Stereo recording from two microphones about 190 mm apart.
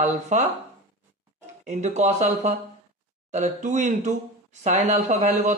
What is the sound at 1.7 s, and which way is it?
A man's voice, 35° right (ahead or behind).